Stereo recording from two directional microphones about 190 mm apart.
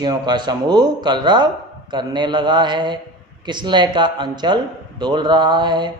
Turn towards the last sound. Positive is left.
turn(degrees=-25)  # may be behind; listen again after turning